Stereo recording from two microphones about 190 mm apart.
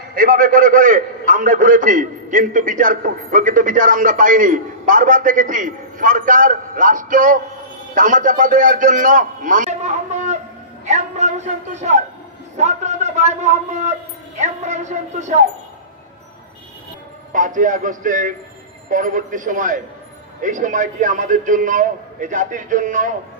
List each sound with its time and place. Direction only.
0.1 s a man's voice: 45° right (ahead or behind)
10.9 s a sound: 35° right (ahead or behind)
12.5 s speech: 35° right (ahead or behind)
17.3 s a man's voice: 45° right (ahead or behind)